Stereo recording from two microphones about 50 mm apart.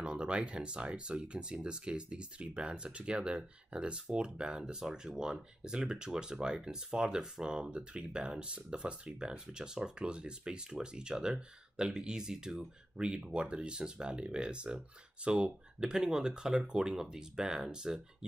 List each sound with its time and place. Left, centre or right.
0.0 s speech: right